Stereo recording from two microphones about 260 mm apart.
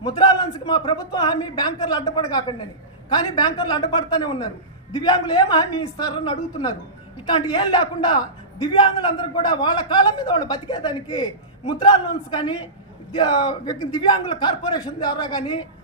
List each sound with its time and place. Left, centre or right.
0.0 s a man's voice: centre
13.1 s a man's voice: centre